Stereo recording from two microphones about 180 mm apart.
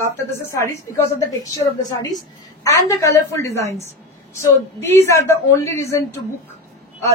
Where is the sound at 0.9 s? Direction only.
15° left (ahead or behind).